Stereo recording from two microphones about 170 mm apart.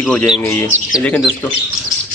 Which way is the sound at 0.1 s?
5° left (ahead or behind).